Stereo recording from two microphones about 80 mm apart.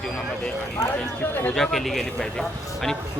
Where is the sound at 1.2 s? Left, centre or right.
Left.